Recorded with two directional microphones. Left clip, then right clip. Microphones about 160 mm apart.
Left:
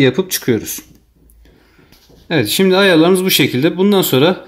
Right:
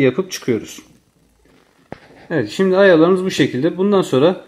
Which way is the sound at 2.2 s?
15° left (ahead or behind).